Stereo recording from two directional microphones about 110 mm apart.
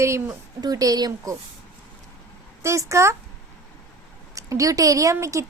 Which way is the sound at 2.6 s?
25° right (ahead or behind).